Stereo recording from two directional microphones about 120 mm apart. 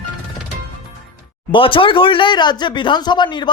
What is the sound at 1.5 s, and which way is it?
Speech, 45° left (ahead or behind).